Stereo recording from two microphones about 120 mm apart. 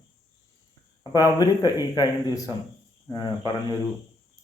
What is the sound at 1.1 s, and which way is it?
A man's voice, 30° left (ahead or behind).